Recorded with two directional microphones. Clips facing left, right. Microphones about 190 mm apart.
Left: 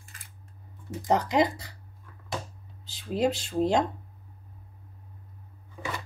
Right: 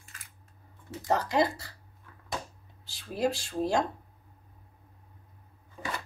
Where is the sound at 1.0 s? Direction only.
20° left (ahead or behind).